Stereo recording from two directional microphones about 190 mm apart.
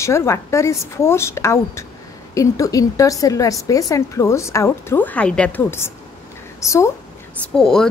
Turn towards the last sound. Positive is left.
turn(degrees=5)  # may be behind; listen again after turning